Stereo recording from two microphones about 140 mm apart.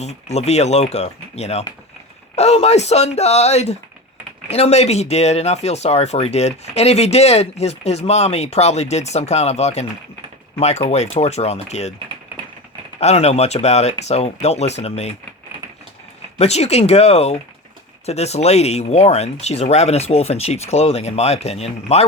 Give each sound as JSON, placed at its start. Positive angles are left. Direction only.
{"t": 0.0, "sound": "speech", "side_deg": 50}
{"t": 13.0, "sound": "speech", "side_deg": 50}
{"t": 16.4, "sound": "speech", "side_deg": 50}